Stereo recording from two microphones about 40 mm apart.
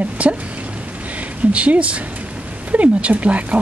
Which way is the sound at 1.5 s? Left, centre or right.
Right.